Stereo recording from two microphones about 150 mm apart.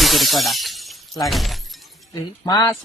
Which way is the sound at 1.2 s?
Centre (ahead or behind).